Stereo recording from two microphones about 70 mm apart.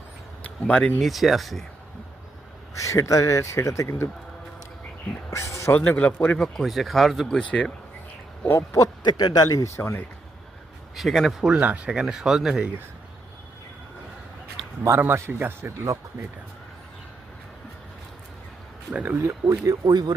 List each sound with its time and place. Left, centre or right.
0.9 s speech: centre
2.7 s speech: left
5.3 s speech: left
5.7 s a man's voice: left
6.3 s speech: centre
7.3 s speech: centre
8.5 s speech: left
9.0 s speech: left
10.9 s speech: centre
11.6 s speech: right
11.9 s speech: centre
14.8 s a man's voice: right
18.9 s speech: right
19.2 s speech: right